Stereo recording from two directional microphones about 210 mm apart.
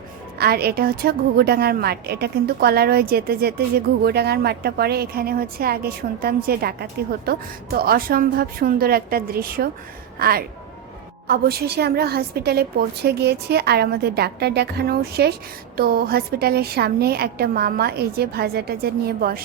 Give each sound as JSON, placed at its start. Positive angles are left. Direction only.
{"t": 0.3, "sound": "a woman's voice", "side_deg": -50}